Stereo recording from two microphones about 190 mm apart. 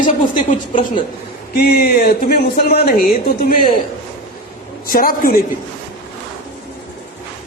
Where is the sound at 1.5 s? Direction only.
55° left (ahead or behind).